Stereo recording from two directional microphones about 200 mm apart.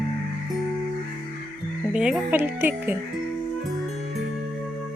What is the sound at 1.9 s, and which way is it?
Speech, 5° right (ahead or behind).